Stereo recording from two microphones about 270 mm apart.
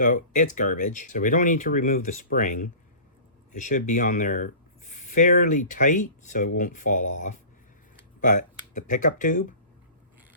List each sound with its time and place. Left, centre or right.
0.0 s speech: left